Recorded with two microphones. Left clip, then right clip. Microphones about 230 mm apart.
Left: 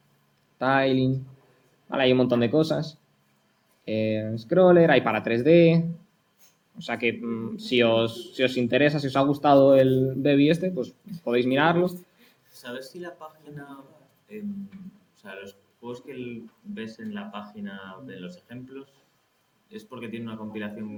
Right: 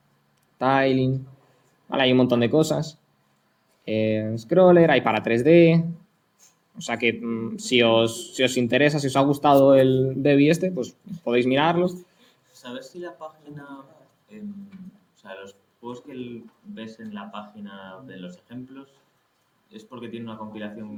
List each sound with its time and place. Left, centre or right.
0.6 s speech: right
12.6 s speech: left
15.3 s speech: left
17.3 s speech: left
19.9 s speech: left